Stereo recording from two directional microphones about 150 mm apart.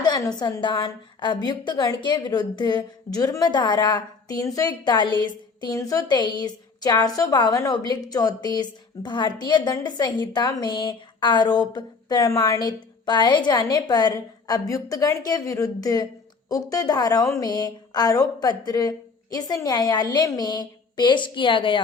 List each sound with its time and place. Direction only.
0.0 s a woman's voice: 30° left (ahead or behind)